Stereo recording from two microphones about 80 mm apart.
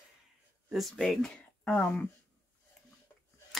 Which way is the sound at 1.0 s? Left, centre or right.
Centre.